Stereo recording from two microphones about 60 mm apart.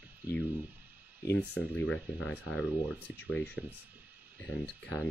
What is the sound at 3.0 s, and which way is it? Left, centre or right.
Speech, left.